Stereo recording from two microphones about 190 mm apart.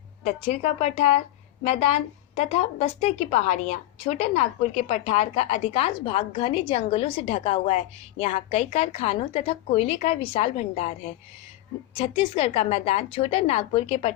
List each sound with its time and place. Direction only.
0.3 s a woman's voice: 35° left (ahead or behind)